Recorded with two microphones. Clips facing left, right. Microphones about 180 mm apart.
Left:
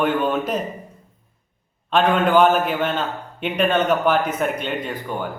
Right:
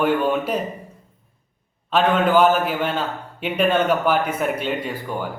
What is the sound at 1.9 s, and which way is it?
A man's voice, 5° right (ahead or behind).